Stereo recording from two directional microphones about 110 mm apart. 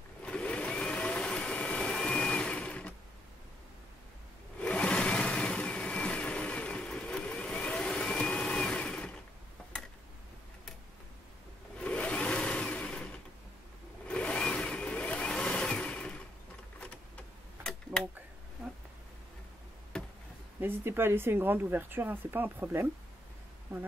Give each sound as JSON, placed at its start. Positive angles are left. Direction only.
{"t": 0.2, "sound": "vehicle", "side_deg": 10}
{"t": 4.6, "sound": "vehicle", "side_deg": 10}
{"t": 11.8, "sound": "a sound", "side_deg": 10}
{"t": 14.0, "sound": "engine", "side_deg": 10}
{"t": 19.9, "sound": "a sound", "side_deg": 5}
{"t": 20.6, "sound": "speech", "side_deg": -20}